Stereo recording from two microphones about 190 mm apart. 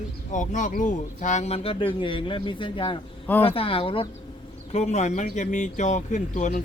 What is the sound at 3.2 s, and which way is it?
Speech, 10° left (ahead or behind).